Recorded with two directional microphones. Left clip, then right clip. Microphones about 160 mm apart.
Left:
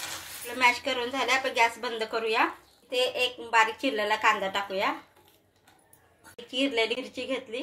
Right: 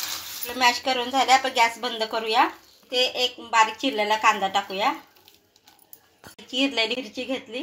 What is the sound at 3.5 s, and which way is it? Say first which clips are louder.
A woman's voice: right 3 dB; 50° right (ahead or behind).